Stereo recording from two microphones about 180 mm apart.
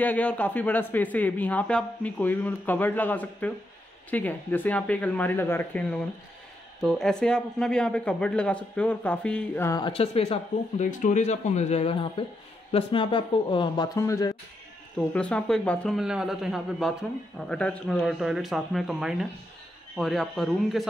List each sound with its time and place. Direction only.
0.0 s speech: 10° left (ahead or behind)
9.7 s speech: 25° left (ahead or behind)
13.9 s speech: 15° left (ahead or behind)
15.0 s speech: 5° left (ahead or behind)